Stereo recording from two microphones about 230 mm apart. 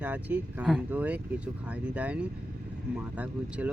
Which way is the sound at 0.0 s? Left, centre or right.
Centre.